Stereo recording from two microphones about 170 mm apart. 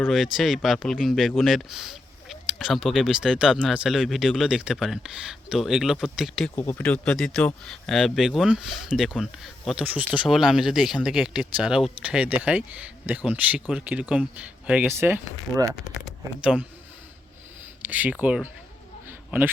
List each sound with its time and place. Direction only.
0.1 s speech: centre (ahead or behind)
6.6 s speech: 10° left (ahead or behind); by 15.7 s 15° right (ahead or behind)
16.0 s speech: 5° right (ahead or behind)
17.8 s speech: 10° right (ahead or behind)
19.0 s a sound: 10° right (ahead or behind)